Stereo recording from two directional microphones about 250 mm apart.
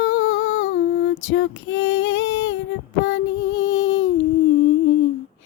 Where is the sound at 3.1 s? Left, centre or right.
Left.